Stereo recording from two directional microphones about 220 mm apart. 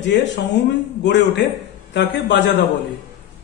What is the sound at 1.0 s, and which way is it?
A man's voice, 50° left (ahead or behind).